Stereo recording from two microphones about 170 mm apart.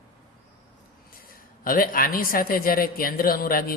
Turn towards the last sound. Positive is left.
turn(degrees=60)  # may be behind; listen again after turning